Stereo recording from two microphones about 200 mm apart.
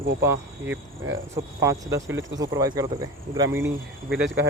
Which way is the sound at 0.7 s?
75° right (ahead or behind).